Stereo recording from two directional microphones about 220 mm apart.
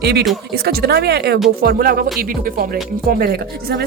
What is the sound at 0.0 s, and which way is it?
Speech, 50° right (ahead or behind).